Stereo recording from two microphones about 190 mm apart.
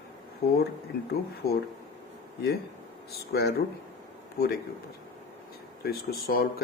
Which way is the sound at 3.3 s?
55° left (ahead or behind).